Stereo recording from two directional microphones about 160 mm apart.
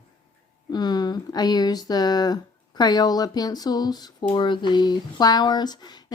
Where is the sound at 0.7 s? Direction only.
25° left (ahead or behind).